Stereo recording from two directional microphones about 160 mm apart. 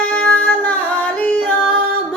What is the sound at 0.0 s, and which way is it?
Music, 10° left (ahead or behind).